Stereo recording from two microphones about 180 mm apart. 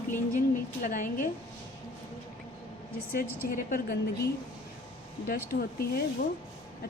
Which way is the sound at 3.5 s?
50° left (ahead or behind).